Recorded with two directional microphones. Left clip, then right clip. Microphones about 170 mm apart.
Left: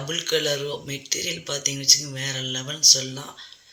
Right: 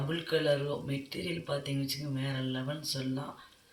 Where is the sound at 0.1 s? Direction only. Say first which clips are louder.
Left 6 dB; 15° left (ahead or behind).